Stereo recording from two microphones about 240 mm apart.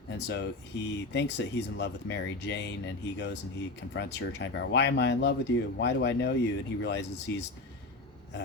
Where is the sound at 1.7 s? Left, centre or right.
Left.